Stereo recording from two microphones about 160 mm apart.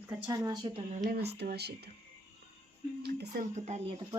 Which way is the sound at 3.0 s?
70° right (ahead or behind).